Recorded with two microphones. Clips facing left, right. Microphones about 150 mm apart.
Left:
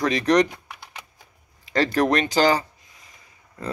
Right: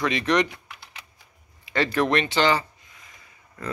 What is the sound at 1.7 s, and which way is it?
Speech, 40° left (ahead or behind).